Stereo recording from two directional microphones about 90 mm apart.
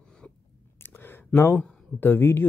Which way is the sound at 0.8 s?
25° left (ahead or behind).